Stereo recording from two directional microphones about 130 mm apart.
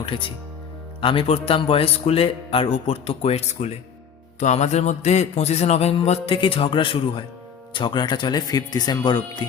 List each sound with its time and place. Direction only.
0.0 s speech: 40° left (ahead or behind)
4.4 s music: 65° left (ahead or behind); by 7.3 s 40° left (ahead or behind)
7.7 s speech: 40° left (ahead or behind)